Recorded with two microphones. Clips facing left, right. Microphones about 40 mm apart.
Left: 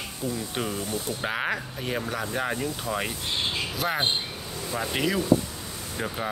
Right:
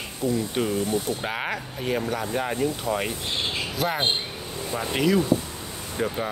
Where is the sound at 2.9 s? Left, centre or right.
Right.